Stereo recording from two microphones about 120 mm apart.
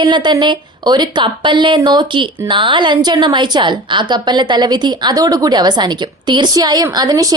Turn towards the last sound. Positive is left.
turn(degrees=-30)  # may be behind; listen again after turning